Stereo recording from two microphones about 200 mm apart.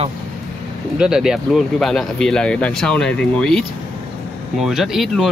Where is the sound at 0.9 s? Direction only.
5° right (ahead or behind).